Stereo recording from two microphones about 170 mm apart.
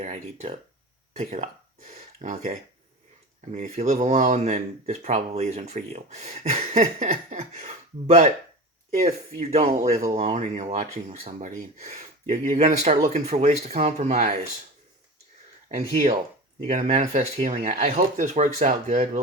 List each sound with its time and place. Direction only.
0.0 s speech: 40° right (ahead or behind)
10.1 s speech: 40° right (ahead or behind)
16.7 s speech: 45° right (ahead or behind)